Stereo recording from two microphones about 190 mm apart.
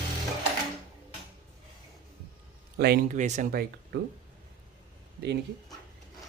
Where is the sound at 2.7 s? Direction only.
55° right (ahead or behind).